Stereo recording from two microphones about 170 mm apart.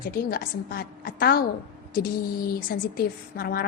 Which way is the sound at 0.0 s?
60° left (ahead or behind).